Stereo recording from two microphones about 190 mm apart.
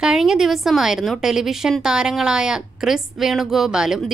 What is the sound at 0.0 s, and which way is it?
A woman's voice, centre (ahead or behind).